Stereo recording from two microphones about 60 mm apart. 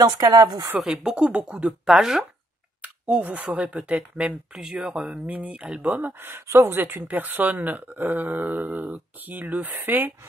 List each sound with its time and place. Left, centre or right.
0.0 s speech: right
0.7 s speech: centre
2.8 s a sound: right
3.5 s speech: right
4.6 s speech: centre
6.2 s speech: right